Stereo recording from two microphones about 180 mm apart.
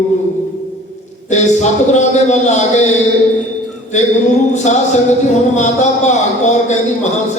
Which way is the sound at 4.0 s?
40° left (ahead or behind).